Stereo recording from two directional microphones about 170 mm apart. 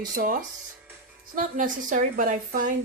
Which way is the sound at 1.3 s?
50° right (ahead or behind).